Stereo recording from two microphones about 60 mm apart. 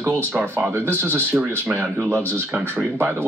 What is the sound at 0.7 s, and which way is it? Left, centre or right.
Speech, right.